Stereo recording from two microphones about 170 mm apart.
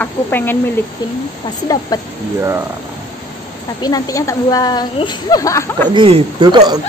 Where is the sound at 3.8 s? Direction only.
20° left (ahead or behind).